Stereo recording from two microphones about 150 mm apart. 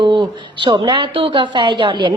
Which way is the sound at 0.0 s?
30° right (ahead or behind).